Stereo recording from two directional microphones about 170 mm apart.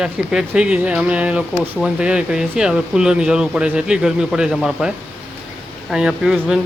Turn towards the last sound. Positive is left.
turn(degrees=-5)  # may be behind; listen again after turning